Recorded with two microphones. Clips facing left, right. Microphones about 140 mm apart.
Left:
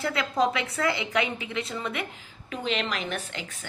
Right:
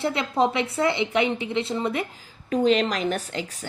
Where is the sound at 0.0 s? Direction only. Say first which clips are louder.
Right 3 dB; 25° right (ahead or behind).